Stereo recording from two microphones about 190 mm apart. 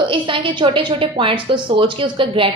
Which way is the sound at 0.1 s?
25° right (ahead or behind).